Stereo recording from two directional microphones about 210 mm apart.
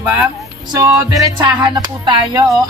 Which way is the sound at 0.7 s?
15° right (ahead or behind).